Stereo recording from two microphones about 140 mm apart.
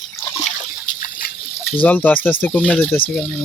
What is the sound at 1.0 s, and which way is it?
Splash, 80° left.